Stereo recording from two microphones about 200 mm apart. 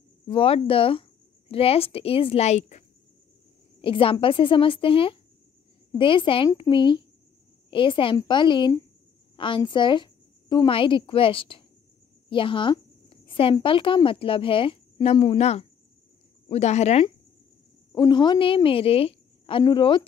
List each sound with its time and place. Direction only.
0.3 s a woman's voice: 25° left (ahead or behind)
3.8 s a woman's voice: 25° left (ahead or behind)
17.9 s a woman's voice: 20° left (ahead or behind)